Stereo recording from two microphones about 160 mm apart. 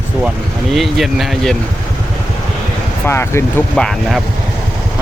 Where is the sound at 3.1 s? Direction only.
15° left (ahead or behind).